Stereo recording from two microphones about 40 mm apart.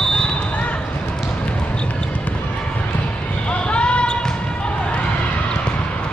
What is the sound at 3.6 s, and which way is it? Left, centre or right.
Basketball bounce, left.